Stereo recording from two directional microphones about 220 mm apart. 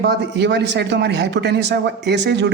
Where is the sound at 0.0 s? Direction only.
50° right (ahead or behind).